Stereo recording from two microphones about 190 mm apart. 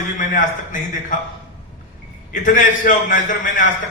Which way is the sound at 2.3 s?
45° left (ahead or behind).